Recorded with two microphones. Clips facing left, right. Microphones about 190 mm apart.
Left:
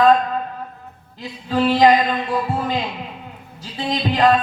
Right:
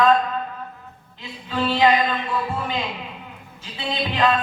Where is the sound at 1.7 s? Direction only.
40° left (ahead or behind).